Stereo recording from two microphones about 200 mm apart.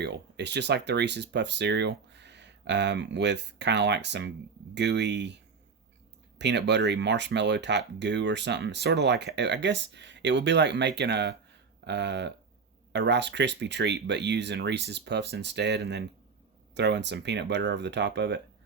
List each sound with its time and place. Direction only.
0.0 s speech: 60° right (ahead or behind)
6.4 s speech: 60° right (ahead or behind)